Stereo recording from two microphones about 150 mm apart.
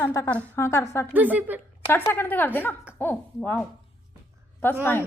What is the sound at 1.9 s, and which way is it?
A woman's voice, 15° left (ahead or behind).